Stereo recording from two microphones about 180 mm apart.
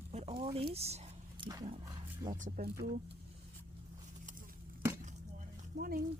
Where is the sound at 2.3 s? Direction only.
45° right (ahead or behind).